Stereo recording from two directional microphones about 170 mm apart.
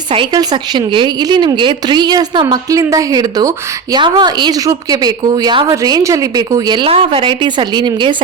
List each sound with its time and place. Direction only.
0.1 s a woman's voice: 30° right (ahead or behind)